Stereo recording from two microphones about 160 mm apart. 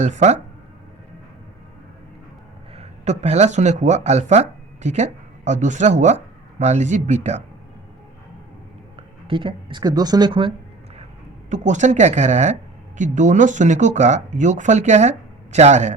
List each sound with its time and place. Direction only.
0.0 s speech: 45° right (ahead or behind)
2.7 s speech: 45° right (ahead or behind)
9.2 s speech: 30° right (ahead or behind)
11.4 s speech: 50° right (ahead or behind)